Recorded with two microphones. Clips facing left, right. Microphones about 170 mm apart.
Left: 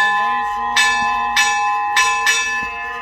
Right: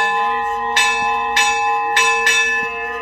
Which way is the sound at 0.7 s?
60° right (ahead or behind).